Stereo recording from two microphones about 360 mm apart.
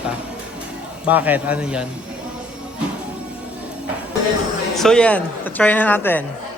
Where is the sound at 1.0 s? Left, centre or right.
Centre.